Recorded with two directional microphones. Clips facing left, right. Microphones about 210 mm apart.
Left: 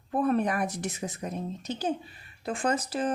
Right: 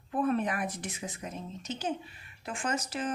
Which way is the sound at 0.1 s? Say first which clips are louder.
Left 3 dB; 40° left (ahead or behind).